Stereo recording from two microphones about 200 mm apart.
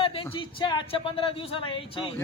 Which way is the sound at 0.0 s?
25° left (ahead or behind).